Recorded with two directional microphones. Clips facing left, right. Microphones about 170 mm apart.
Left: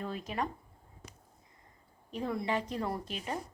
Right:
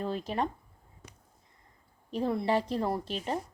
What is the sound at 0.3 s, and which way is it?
Speech, 30° right (ahead or behind).